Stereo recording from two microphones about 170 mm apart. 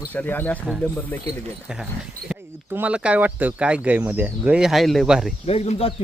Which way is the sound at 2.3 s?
10° right (ahead or behind).